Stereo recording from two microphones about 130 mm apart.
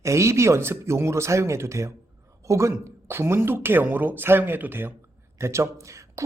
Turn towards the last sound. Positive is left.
turn(degrees=-25)  # may be behind; listen again after turning